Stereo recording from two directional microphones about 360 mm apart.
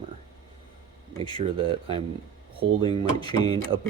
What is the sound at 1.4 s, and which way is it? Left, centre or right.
Speech, centre.